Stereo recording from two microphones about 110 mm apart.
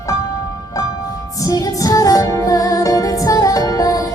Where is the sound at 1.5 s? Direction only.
35° left (ahead or behind).